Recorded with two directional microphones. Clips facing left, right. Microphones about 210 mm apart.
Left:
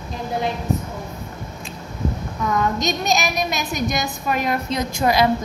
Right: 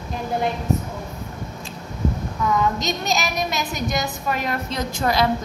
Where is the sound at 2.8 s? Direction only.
15° left (ahead or behind).